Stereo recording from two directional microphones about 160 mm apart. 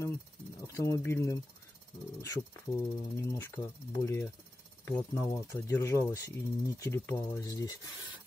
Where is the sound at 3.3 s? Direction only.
15° left (ahead or behind).